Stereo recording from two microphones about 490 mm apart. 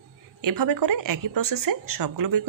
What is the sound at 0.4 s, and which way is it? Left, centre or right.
A woman's voice, right.